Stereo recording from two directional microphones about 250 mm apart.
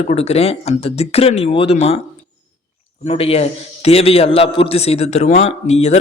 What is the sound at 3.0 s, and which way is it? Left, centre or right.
Speech, left.